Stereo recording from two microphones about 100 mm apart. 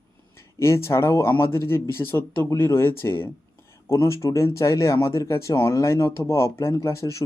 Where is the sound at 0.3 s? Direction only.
25° left (ahead or behind).